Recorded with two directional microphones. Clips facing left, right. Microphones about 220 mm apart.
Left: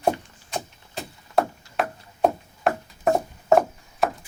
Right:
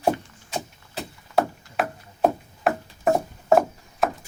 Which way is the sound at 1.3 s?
Centre (ahead or behind).